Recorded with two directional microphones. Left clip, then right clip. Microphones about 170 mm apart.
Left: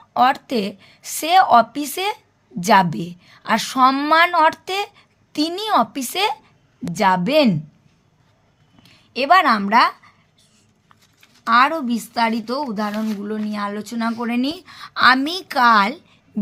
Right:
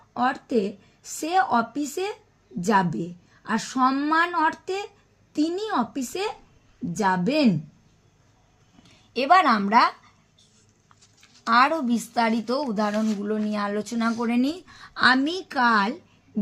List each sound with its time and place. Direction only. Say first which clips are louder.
0.1 s a woman's voice: left 7 dB; 35° left (ahead or behind)
8.8 s speech: left 4 dB; 5° left (ahead or behind)
11.0 s a sound: even; 65° left (ahead or behind)
11.4 s speech: left 4 dB; centre (ahead or behind); by 16.4 s 15° left (ahead or behind)